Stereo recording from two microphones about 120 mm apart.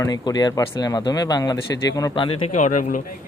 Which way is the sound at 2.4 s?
90° left.